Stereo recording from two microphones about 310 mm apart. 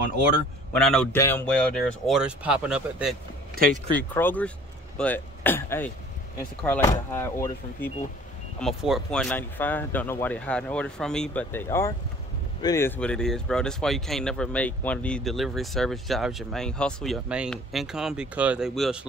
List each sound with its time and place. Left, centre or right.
0.7 s speech: centre
3.5 s speech: right
4.1 s speech: centre